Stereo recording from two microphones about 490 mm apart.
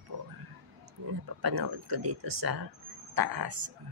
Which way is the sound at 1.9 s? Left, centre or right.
Right.